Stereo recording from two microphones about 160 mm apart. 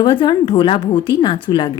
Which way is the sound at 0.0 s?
30° left (ahead or behind).